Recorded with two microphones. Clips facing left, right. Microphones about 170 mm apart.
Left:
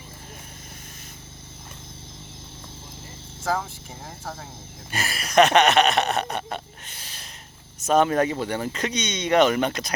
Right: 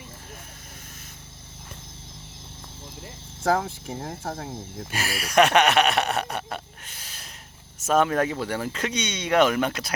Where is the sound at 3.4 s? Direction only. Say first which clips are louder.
Right 4 dB; 50° right (ahead or behind).